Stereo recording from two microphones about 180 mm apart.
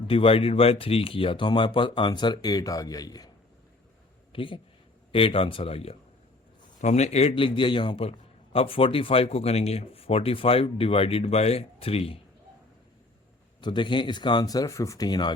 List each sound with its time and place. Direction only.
0.1 s a man's voice: 30° left (ahead or behind)
13.6 s speech: 25° left (ahead or behind)